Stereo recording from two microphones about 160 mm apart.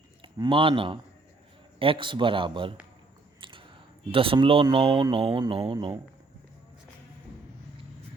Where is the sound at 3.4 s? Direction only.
30° right (ahead or behind).